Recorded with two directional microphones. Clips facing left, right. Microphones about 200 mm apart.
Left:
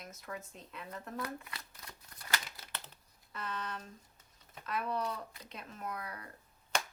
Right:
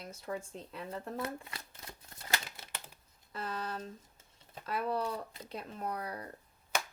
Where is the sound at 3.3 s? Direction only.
35° right (ahead or behind).